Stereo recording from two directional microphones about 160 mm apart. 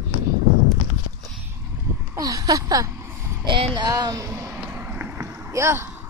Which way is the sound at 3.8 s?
25° right (ahead or behind).